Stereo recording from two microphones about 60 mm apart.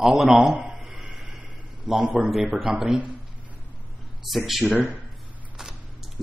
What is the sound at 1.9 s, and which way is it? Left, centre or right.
A man's voice, centre.